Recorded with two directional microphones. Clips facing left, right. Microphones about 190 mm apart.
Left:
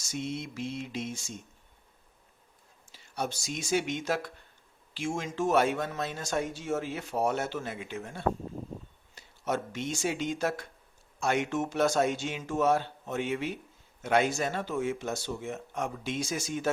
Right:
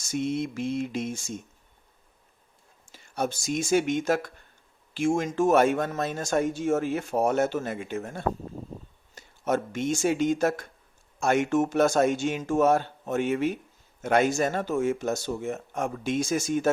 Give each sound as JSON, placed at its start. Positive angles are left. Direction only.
{"t": 0.0, "sound": "speech", "side_deg": -50}
{"t": 2.9, "sound": "speech", "side_deg": -50}